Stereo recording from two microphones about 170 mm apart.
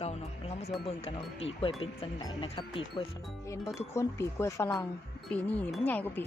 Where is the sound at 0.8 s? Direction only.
30° left (ahead or behind).